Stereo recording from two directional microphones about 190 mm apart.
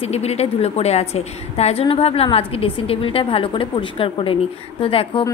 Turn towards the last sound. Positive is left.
turn(degrees=30)  # may be behind; listen again after turning